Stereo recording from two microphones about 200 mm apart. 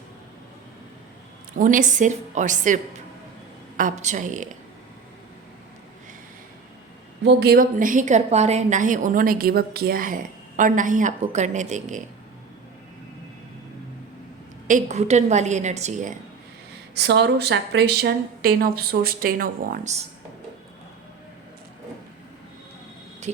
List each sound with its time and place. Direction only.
1.5 s a woman's voice: 40° right (ahead or behind)
7.3 s a woman's voice: 55° right (ahead or behind); by 12.0 s 35° right (ahead or behind)
14.7 s a woman's voice: 35° right (ahead or behind)
16.9 s speech: 55° right (ahead or behind); by 20.1 s 35° right (ahead or behind)